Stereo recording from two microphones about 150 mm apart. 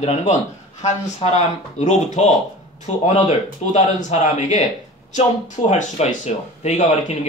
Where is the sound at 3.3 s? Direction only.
50° left (ahead or behind).